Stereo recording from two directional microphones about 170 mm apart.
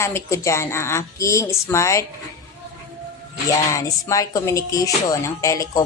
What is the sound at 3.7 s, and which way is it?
Speech, 20° left (ahead or behind).